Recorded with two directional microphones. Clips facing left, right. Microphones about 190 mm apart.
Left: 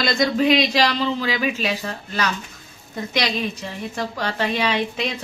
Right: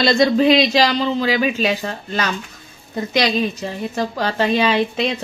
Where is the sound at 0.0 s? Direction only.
30° right (ahead or behind).